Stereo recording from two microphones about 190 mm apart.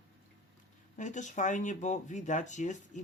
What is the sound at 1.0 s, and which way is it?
Speech, 40° left (ahead or behind).